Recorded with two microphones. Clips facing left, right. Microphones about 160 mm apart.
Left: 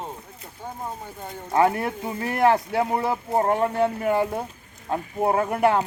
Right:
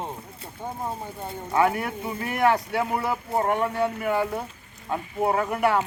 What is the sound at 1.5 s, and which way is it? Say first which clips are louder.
Speech: left 2 dB; 30° left (ahead or behind).